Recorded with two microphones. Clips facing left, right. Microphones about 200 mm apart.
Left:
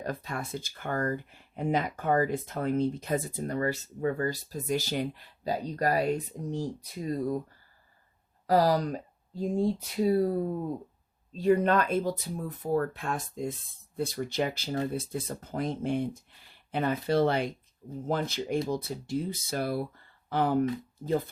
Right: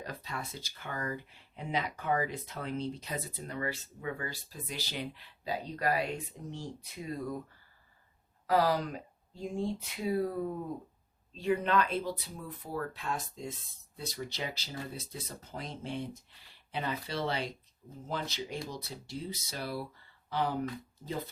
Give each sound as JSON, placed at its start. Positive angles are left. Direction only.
{"t": 0.0, "sound": "speech", "side_deg": 50}
{"t": 8.4, "sound": "speech", "side_deg": 40}